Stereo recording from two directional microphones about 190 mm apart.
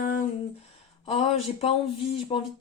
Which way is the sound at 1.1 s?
30° left (ahead or behind).